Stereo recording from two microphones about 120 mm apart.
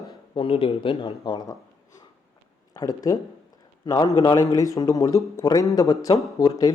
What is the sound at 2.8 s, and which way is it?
Speech, 30° left (ahead or behind).